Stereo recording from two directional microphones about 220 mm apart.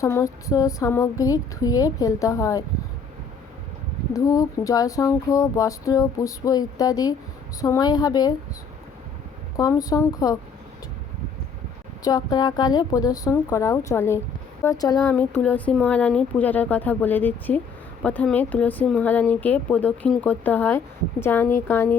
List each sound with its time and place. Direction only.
0.0 s speech: 15° left (ahead or behind)
4.1 s speech: 15° left (ahead or behind)
9.6 s speech: 15° left (ahead or behind)
12.0 s speech: 20° left (ahead or behind)